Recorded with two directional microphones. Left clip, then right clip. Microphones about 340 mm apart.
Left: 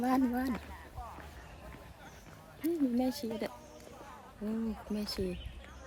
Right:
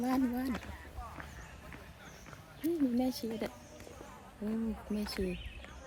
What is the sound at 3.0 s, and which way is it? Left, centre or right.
Speech, centre.